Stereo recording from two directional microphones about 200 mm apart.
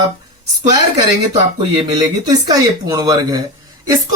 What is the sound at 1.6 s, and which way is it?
Speech, 20° right (ahead or behind).